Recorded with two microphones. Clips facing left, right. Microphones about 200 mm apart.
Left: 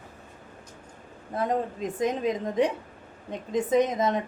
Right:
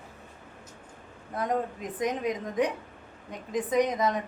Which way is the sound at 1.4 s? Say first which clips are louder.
Left 2 dB; 25° left (ahead or behind).